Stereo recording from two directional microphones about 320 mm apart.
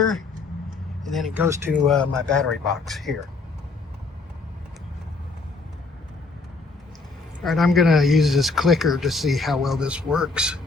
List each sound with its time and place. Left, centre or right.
1.0 s speech: centre
7.4 s speech: centre